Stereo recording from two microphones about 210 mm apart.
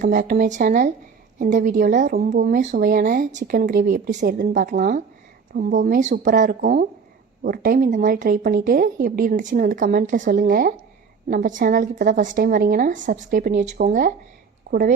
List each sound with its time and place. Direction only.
0.0 s a woman's voice: 40° right (ahead or behind)